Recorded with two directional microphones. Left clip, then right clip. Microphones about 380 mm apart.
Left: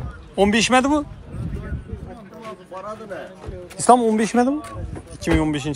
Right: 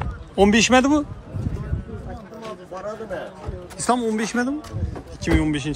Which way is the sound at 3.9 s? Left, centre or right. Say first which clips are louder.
Left 5 dB; centre.